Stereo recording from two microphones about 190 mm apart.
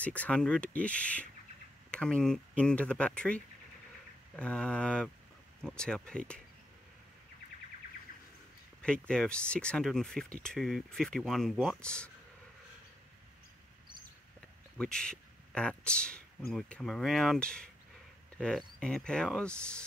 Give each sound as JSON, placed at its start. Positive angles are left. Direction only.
{"t": 0.0, "sound": "speech", "side_deg": 5}
{"t": 8.1, "sound": "bird", "side_deg": 45}
{"t": 8.8, "sound": "speech", "side_deg": 5}
{"t": 14.8, "sound": "speech", "side_deg": 5}
{"t": 18.8, "sound": "speech", "side_deg": 5}